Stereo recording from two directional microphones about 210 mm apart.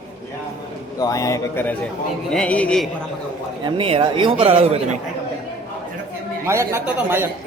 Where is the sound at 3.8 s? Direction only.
25° right (ahead or behind).